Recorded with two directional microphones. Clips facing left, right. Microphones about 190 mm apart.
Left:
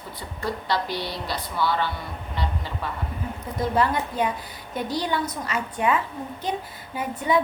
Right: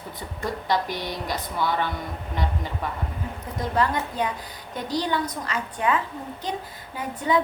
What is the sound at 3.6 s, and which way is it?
A woman's voice, 5° left (ahead or behind).